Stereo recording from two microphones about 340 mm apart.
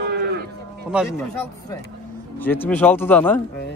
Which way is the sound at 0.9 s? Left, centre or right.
Centre.